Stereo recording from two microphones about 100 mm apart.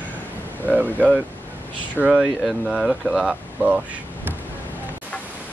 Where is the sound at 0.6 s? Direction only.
15° right (ahead or behind).